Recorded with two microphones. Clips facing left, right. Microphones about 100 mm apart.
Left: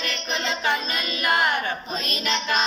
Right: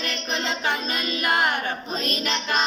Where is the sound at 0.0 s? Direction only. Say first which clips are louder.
Even; 40° right (ahead or behind).